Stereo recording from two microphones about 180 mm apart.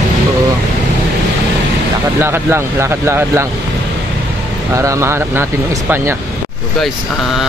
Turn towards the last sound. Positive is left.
turn(degrees=-15)  # may be behind; listen again after turning